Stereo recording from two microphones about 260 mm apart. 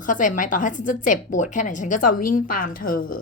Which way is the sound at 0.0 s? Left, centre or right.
Left.